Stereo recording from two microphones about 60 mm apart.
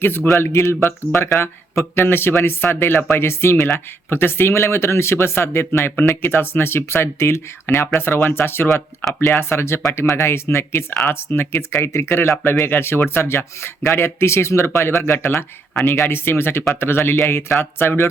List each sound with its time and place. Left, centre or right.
0.0 s speech: left
0.3 s speech: left
8.2 s speech: left
15.0 s speech: left